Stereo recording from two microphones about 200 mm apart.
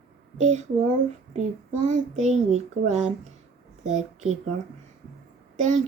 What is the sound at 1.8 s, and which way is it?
A child's voice, 35° right (ahead or behind).